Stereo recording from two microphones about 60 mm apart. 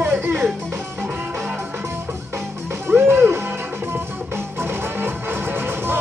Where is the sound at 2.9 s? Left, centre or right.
Right.